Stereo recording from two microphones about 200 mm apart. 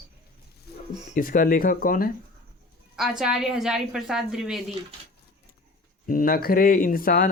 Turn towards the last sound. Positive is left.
turn(degrees=45)  # may be behind; listen again after turning